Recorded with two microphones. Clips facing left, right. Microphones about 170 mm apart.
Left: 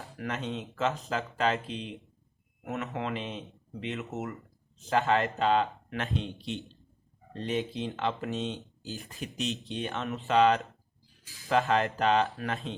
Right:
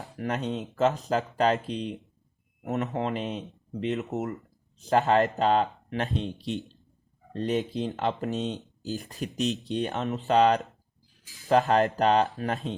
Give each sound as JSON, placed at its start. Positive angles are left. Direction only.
{"t": 0.2, "sound": "speech", "side_deg": -40}
{"t": 0.5, "sound": "speech", "side_deg": 0}
{"t": 0.8, "sound": "speech", "side_deg": -40}